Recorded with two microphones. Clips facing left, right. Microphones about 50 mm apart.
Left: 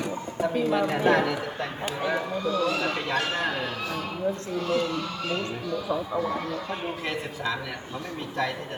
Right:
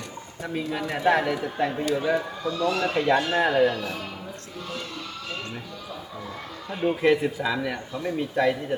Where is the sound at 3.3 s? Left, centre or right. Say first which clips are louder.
Right 7 dB; centre.